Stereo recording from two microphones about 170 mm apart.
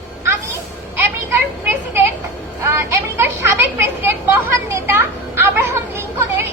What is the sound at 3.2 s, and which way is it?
Speech, 15° right (ahead or behind).